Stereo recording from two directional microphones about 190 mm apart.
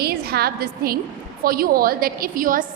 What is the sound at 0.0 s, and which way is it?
A woman's voice, 55° right (ahead or behind).